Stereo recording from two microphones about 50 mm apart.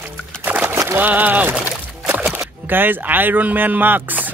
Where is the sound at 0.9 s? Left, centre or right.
Right.